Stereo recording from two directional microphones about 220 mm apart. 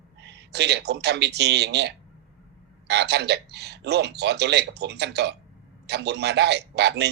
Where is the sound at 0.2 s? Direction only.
50° right (ahead or behind).